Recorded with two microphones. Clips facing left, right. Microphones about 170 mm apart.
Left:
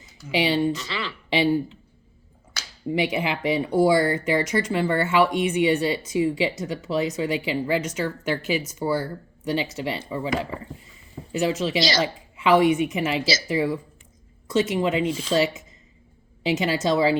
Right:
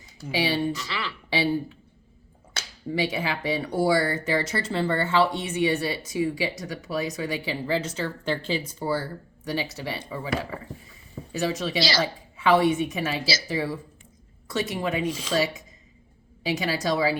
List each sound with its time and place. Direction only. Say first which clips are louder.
0.3 s speech: left 3 dB; 20° left (ahead or behind)
2.9 s speech: left 3 dB; 20° left (ahead or behind)
11.3 s speech: left 4 dB; 20° left (ahead or behind)